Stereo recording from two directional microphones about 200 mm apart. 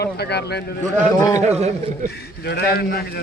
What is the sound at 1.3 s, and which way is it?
Speech, 35° right (ahead or behind).